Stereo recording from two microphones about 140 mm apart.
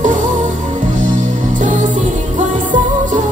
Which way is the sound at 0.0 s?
65° right (ahead or behind).